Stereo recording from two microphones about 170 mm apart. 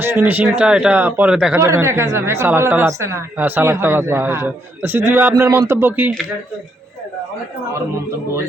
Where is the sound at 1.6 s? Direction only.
15° right (ahead or behind).